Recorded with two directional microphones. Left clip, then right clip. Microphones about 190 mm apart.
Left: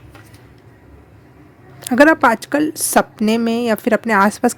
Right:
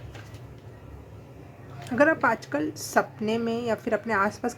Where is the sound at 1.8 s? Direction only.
50° left (ahead or behind).